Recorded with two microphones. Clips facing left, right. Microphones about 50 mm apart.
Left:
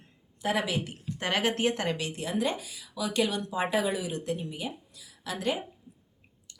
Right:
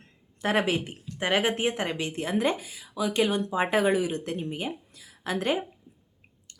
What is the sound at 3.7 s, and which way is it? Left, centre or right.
A woman's voice, right.